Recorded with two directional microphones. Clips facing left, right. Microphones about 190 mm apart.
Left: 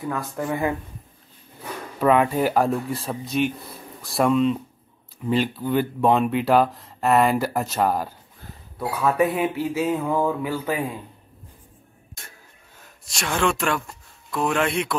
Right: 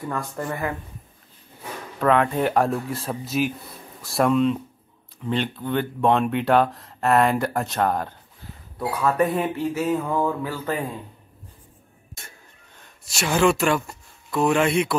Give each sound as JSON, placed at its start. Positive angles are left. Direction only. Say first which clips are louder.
{"t": 0.0, "sound": "speech", "louder": "left 1 dB", "side_deg": 5}
{"t": 2.0, "sound": "speech", "louder": "left 1 dB", "side_deg": 5}
{"t": 12.2, "sound": "a sound", "louder": "even", "side_deg": 0}